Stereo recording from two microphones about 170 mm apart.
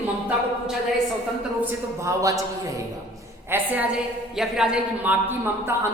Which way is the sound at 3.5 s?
10° right (ahead or behind).